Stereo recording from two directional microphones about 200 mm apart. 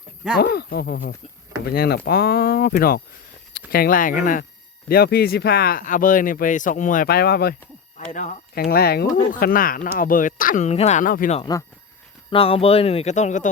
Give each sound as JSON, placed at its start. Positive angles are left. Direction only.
{"t": 0.3, "sound": "speech", "side_deg": 55}
{"t": 8.1, "sound": "speech", "side_deg": 40}
{"t": 8.6, "sound": "speech", "side_deg": 50}
{"t": 11.3, "sound": "speech", "side_deg": 20}